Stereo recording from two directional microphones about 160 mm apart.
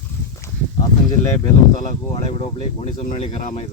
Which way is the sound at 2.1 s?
35° left (ahead or behind).